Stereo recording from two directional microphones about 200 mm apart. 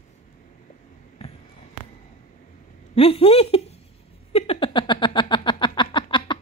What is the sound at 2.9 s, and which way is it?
Speech, 30° left (ahead or behind).